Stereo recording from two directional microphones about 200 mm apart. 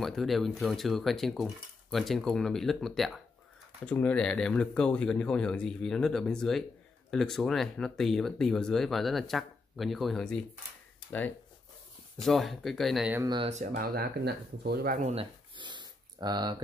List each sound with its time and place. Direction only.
0.0 s speech: centre (ahead or behind)
13.2 s speech: 20° right (ahead or behind)
13.5 s speech: 40° right (ahead or behind)
15.0 s a sound: 25° right (ahead or behind)